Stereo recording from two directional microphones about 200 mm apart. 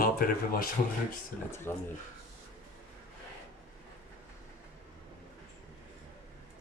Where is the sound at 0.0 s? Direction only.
45° left (ahead or behind).